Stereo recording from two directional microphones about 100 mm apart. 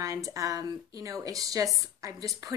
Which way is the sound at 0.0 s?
35° right (ahead or behind).